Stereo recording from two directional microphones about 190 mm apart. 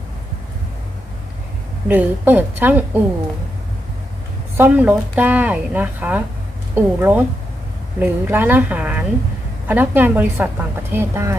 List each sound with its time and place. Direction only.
1.9 s speech: 10° right (ahead or behind)
4.5 s speech: 10° right (ahead or behind)